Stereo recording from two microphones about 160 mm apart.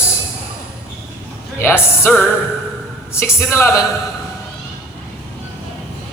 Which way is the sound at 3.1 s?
15° left (ahead or behind).